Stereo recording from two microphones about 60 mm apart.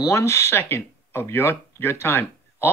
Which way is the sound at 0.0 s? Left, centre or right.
Left.